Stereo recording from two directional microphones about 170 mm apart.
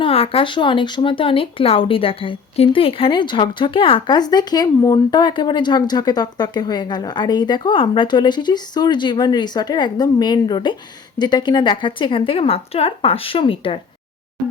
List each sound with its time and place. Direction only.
0.0 s a woman's voice: 35° left (ahead or behind)